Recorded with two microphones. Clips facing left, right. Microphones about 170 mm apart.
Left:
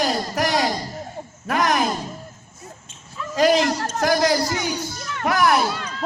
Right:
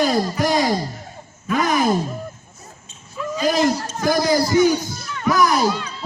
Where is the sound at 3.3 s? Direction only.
85° left.